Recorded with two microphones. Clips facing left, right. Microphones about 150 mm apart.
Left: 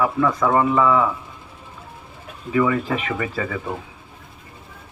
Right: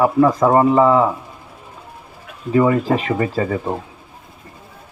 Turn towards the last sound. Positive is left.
turn(degrees=-35)  # may be behind; listen again after turning